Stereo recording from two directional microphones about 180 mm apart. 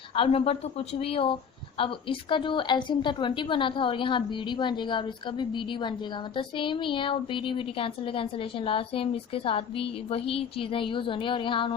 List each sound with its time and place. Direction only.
0.2 s a woman's voice: 35° left (ahead or behind)